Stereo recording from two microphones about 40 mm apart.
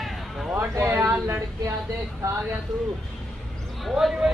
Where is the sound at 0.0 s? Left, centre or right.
Centre.